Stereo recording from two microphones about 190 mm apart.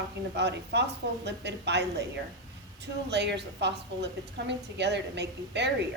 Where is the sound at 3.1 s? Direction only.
65° right (ahead or behind).